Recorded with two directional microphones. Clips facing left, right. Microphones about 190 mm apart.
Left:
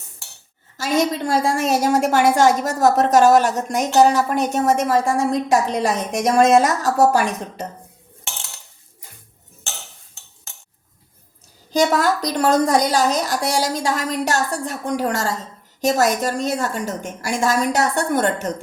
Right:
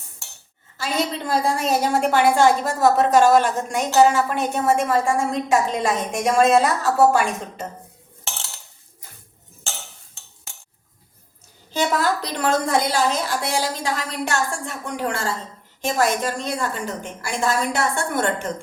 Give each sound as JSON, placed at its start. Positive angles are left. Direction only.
{"t": 0.8, "sound": "a woman's voice", "side_deg": 45}
{"t": 11.7, "sound": "a woman's voice", "side_deg": 45}